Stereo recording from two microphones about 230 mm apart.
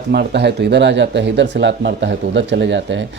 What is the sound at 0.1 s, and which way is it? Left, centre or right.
Speech, right.